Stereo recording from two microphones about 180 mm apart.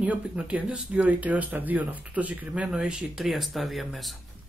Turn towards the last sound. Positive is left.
turn(degrees=0)  # may be behind; listen again after turning